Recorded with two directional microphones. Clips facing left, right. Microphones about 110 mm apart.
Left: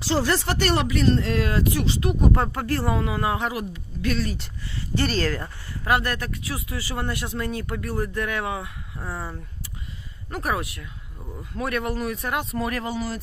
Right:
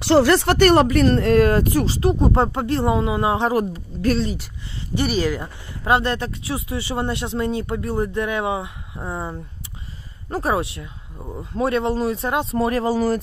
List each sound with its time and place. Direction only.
0.0 s speech: 65° right (ahead or behind); by 3.5 s 25° right (ahead or behind)
3.5 s speech: 40° right (ahead or behind)
4.7 s speech: 15° right (ahead or behind)
5.9 s speech: 25° right (ahead or behind); by 13.2 s 45° right (ahead or behind)